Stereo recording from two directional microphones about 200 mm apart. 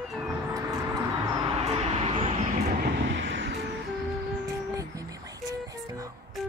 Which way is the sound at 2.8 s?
65° right (ahead or behind).